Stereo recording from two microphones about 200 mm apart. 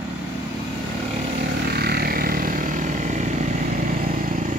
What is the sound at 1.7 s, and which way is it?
Vehicle, 50° right (ahead or behind).